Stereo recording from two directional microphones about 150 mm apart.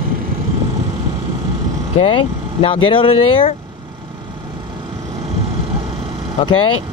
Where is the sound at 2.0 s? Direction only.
35° left (ahead or behind).